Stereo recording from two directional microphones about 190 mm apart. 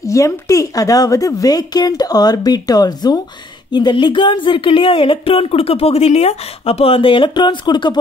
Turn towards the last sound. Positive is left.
turn(degrees=20)  # may be behind; listen again after turning